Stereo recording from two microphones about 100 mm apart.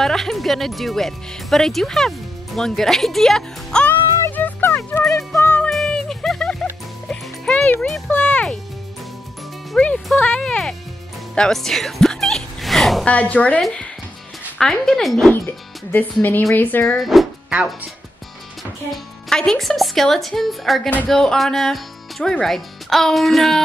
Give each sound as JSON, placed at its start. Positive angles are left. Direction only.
{"t": 0.0, "sound": "speech", "side_deg": 5}
{"t": 4.4, "sound": "fowl", "side_deg": 20}
{"t": 5.4, "sound": "music", "side_deg": 15}
{"t": 8.1, "sound": "a child's voice", "side_deg": 15}
{"t": 9.7, "sound": "music", "side_deg": 5}
{"t": 10.2, "sound": "speech", "side_deg": 10}
{"t": 11.3, "sound": "music", "side_deg": 5}
{"t": 13.0, "sound": "speech", "side_deg": 15}
{"t": 15.9, "sound": "speech", "side_deg": 15}
{"t": 16.8, "sound": "speech", "side_deg": 5}
{"t": 18.9, "sound": "speech", "side_deg": 5}